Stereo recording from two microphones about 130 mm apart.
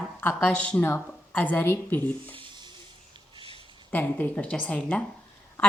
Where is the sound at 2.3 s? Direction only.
35° right (ahead or behind).